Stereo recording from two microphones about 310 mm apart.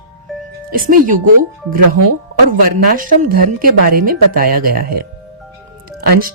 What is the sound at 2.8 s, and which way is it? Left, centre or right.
Speech, right.